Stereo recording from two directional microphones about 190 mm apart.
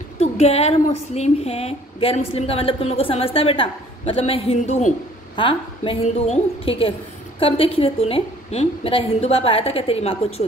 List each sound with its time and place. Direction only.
0.2 s a woman's voice: 35° left (ahead or behind)